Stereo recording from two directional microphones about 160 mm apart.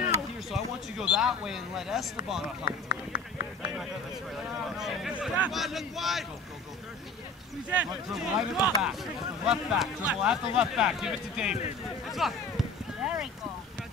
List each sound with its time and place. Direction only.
0.5 s speech: 5° right (ahead or behind)
2.6 s speech: 80° left
4.7 s speech: 5° right (ahead or behind)
7.7 s speech: 5° right (ahead or behind)
12.1 s a sound: centre (ahead or behind)